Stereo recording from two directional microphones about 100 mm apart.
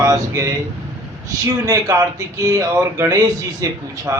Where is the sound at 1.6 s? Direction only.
35° right (ahead or behind).